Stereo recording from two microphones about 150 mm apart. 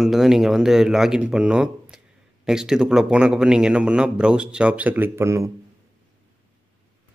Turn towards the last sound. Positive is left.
turn(degrees=-20)  # may be behind; listen again after turning